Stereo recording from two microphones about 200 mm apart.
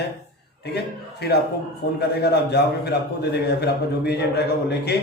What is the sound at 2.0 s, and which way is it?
A man's voice, 55° left (ahead or behind).